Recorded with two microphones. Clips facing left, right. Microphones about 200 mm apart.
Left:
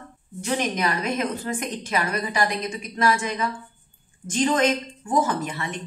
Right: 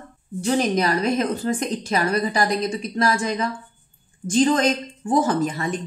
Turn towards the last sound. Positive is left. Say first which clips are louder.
# right 5 dB
turn(degrees=-35)  # may be behind; listen again after turning